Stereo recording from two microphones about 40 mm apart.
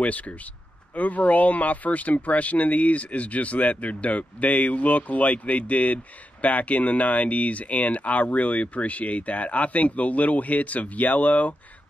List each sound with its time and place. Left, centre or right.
0.0 s speech: left